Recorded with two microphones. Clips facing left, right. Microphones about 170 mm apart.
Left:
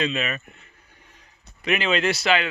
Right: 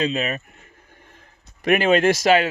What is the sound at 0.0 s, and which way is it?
Speech, 40° right (ahead or behind).